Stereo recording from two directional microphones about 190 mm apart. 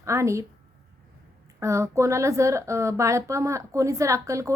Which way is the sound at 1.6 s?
15° right (ahead or behind).